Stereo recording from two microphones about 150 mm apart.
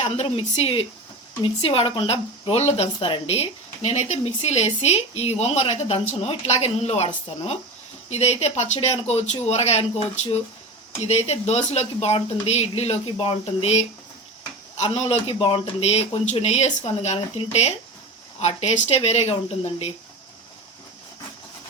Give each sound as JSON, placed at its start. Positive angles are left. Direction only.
{"t": 0.0, "sound": "speech", "side_deg": 45}
{"t": 11.0, "sound": "speech", "side_deg": 45}